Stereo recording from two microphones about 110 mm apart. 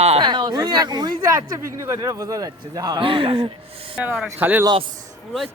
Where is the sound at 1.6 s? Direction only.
30° right (ahead or behind).